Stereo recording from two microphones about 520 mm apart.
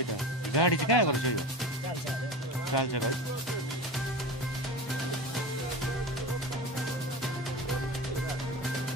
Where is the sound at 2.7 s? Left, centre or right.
Left.